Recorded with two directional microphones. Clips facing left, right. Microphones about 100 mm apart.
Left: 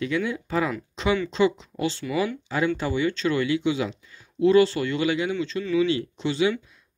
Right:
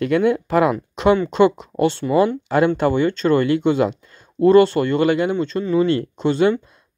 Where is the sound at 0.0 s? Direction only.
55° right (ahead or behind).